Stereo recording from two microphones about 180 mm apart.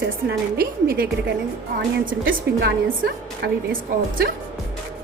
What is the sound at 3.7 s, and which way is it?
Speech, 55° right (ahead or behind).